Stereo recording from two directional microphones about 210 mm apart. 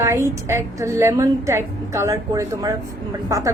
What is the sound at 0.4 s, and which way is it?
A woman's voice, 15° right (ahead or behind).